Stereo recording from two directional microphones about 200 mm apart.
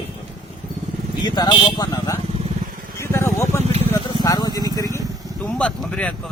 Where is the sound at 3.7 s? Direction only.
30° right (ahead or behind).